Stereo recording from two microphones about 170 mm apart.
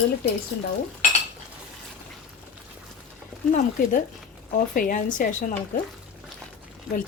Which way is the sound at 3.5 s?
50° left (ahead or behind).